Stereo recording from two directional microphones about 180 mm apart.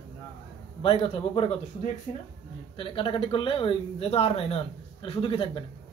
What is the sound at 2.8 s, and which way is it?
Speech, 30° left (ahead or behind).